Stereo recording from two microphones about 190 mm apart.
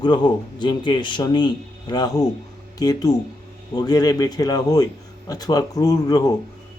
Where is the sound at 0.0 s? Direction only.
20° left (ahead or behind).